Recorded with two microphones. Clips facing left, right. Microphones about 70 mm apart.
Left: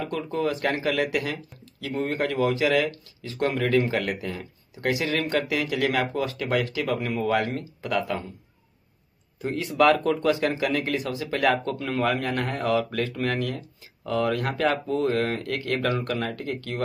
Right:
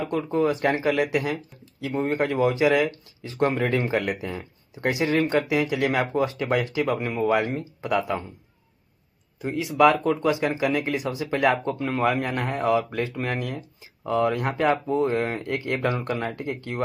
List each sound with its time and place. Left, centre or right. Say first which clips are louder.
0.0 s speech: right 4 dB; right
9.4 s speech: right 2 dB; centre